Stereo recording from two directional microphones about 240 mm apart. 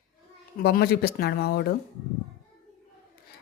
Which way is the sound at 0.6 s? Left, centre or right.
Left.